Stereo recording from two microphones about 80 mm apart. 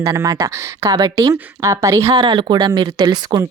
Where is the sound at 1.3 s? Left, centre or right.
Right.